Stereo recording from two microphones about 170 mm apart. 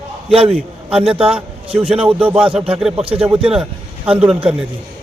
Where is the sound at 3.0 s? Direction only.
35° right (ahead or behind).